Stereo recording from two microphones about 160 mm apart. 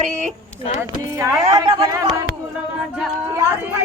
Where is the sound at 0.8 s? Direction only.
15° right (ahead or behind).